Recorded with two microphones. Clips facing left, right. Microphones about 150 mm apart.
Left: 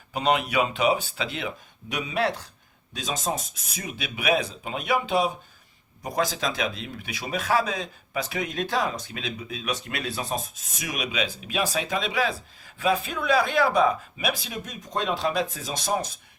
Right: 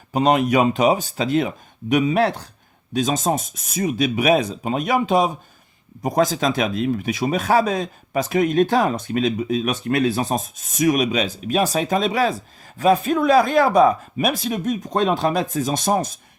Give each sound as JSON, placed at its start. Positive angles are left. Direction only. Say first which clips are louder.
{"t": 0.1, "sound": "speech", "louder": "right 7 dB", "side_deg": -40}